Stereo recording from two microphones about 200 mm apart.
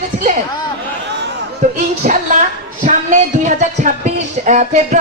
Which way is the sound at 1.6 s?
35° right (ahead or behind).